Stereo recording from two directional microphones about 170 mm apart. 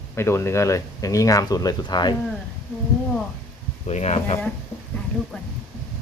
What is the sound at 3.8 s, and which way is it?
Speech, 40° left (ahead or behind).